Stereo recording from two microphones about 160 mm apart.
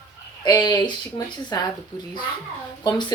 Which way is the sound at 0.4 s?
25° left (ahead or behind).